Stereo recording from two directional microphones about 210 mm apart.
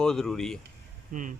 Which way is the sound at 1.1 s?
40° right (ahead or behind).